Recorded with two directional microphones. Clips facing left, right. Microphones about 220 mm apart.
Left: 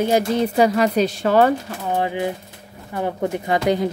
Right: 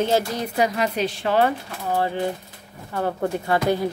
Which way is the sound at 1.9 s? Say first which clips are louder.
Left 1 dB; 15° left (ahead or behind).